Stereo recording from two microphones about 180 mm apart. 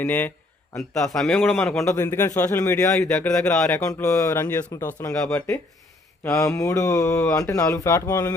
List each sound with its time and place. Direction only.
0.0 s a man's voice: 10° left (ahead or behind)
1.8 s speech: 15° left (ahead or behind)
3.0 s a man's voice: 5° left (ahead or behind)
3.8 s speech: 15° left (ahead or behind)
6.2 s speech: 15° left (ahead or behind)